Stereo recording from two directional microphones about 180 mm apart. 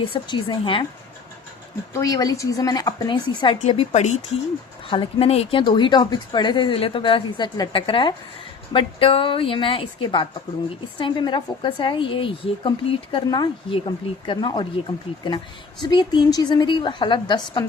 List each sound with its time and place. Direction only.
0.0 s a woman's voice: 25° left (ahead or behind)
1.9 s a woman's voice: 20° left (ahead or behind)